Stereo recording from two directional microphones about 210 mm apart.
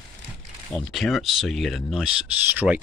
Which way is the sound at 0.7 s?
Centre (ahead or behind).